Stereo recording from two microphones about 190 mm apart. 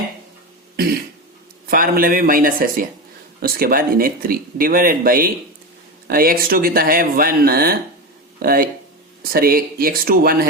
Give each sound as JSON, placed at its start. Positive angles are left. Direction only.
{"t": 1.6, "sound": "speech", "side_deg": -50}